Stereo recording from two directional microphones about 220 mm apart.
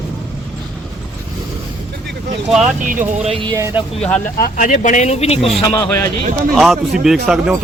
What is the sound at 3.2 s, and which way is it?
Speech, 25° right (ahead or behind).